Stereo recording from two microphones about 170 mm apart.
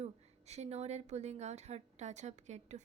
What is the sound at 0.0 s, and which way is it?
A woman's voice, 40° right (ahead or behind).